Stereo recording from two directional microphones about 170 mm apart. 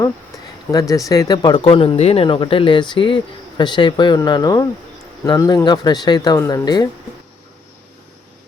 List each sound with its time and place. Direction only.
0.7 s speech: 20° left (ahead or behind)